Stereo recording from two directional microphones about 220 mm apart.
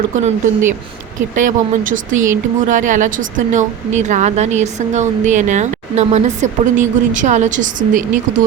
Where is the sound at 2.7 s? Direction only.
35° right (ahead or behind).